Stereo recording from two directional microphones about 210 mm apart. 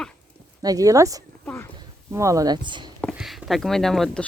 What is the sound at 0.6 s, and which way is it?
Speech, 15° right (ahead or behind).